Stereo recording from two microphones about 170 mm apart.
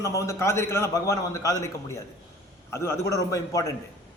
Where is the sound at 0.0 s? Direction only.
20° left (ahead or behind).